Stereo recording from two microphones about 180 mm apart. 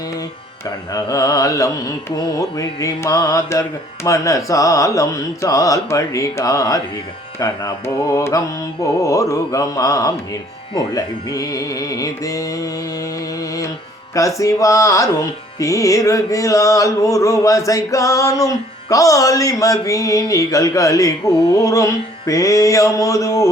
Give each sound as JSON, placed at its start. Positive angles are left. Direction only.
{"t": 0.9, "sound": "carnatic music", "side_deg": 20}
{"t": 13.4, "sound": "music", "side_deg": 20}